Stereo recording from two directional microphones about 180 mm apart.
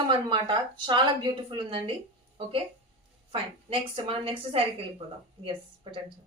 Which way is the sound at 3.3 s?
30° right (ahead or behind).